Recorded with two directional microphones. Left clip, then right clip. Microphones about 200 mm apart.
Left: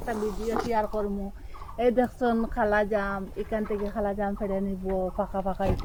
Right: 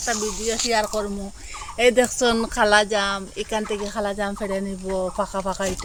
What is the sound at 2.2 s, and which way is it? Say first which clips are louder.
Speech: right 6 dB; 55° right (ahead or behind).